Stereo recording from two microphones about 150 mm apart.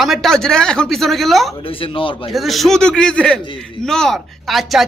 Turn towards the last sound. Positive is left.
turn(degrees=0)  # may be behind; listen again after turning